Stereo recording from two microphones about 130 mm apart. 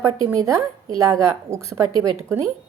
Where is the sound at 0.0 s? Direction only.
20° right (ahead or behind).